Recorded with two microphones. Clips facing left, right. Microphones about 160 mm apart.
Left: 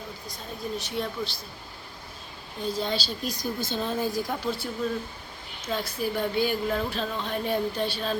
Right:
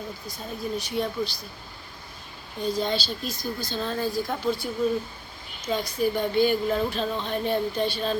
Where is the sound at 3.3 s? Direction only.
20° left (ahead or behind).